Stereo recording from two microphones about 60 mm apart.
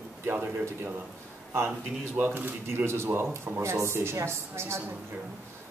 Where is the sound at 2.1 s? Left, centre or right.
Right.